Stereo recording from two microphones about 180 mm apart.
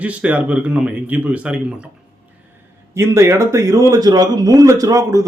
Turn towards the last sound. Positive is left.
turn(degrees=-20)  # may be behind; listen again after turning